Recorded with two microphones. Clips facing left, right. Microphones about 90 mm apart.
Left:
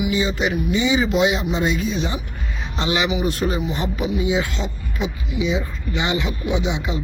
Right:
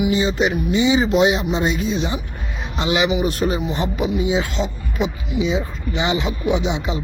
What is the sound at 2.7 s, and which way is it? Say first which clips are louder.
A man's voice: right 3 dB; 10° right (ahead or behind).